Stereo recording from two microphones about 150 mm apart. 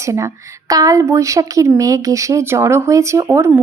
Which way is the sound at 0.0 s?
20° right (ahead or behind).